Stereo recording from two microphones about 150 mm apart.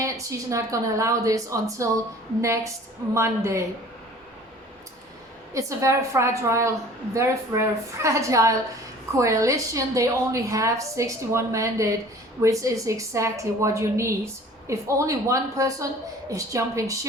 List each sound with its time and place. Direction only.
0.0 s a woman's voice: 20° right (ahead or behind)
5.5 s a woman's voice: 20° right (ahead or behind)